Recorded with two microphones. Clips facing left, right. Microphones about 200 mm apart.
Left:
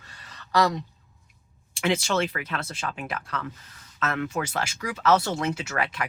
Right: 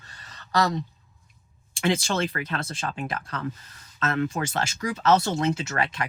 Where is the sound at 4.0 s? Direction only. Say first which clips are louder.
Right 2 dB; 30° right (ahead or behind).